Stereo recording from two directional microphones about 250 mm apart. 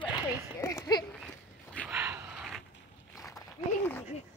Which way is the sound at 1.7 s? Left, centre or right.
Centre.